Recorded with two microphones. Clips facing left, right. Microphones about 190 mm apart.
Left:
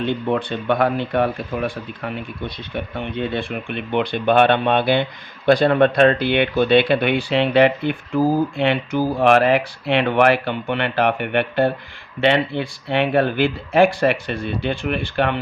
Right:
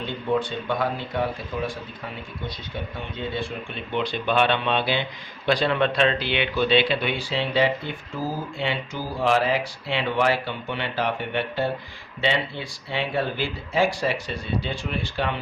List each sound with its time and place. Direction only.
0.0 s speech: 65° left (ahead or behind)